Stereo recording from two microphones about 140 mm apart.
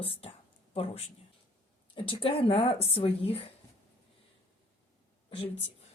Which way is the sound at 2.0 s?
40° left (ahead or behind).